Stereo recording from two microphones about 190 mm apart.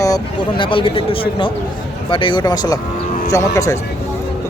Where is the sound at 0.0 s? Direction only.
20° left (ahead or behind).